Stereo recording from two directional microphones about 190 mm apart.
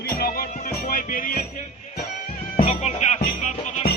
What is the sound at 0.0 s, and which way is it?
Music, 50° left (ahead or behind).